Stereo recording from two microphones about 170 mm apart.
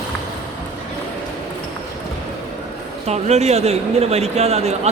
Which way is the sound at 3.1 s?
40° right (ahead or behind).